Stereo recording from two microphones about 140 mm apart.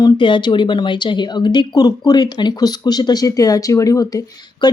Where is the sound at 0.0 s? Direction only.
35° left (ahead or behind).